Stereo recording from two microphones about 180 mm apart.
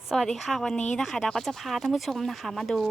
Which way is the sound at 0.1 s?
Centre (ahead or behind).